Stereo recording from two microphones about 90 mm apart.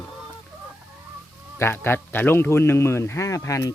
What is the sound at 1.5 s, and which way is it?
Speech, 25° left (ahead or behind).